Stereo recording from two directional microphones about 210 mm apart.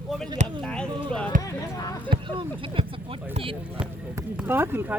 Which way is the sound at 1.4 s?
15° left (ahead or behind).